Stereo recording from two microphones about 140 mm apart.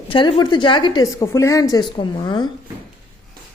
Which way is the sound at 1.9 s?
35° left (ahead or behind).